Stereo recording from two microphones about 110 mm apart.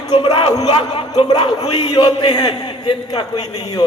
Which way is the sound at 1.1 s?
40° left (ahead or behind).